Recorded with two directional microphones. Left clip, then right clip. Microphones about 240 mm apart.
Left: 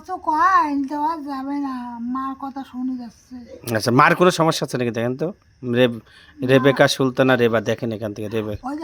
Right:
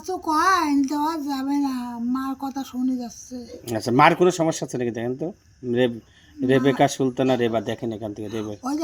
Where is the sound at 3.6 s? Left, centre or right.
Left.